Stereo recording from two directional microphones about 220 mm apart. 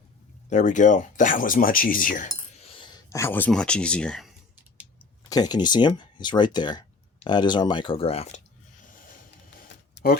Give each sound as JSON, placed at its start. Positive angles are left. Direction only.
{"t": 0.5, "sound": "speech", "side_deg": 35}
{"t": 2.6, "sound": "speech", "side_deg": 25}
{"t": 5.3, "sound": "speech", "side_deg": 20}
{"t": 9.6, "sound": "a sound", "side_deg": 40}